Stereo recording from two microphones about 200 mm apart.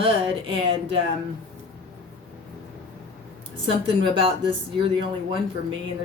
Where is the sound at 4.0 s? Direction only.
25° right (ahead or behind).